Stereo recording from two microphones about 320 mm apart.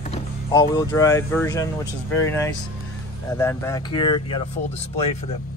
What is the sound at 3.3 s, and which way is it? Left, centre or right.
Speech, centre.